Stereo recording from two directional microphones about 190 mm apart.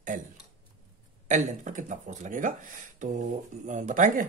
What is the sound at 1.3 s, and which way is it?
Speech, 40° right (ahead or behind).